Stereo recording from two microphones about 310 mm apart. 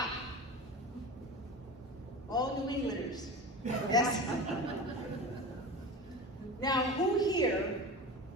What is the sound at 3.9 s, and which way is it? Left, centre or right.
Speech, centre.